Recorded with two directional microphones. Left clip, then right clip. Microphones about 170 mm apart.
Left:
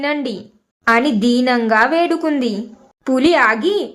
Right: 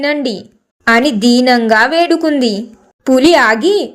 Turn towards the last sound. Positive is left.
turn(degrees=-25)  # may be behind; listen again after turning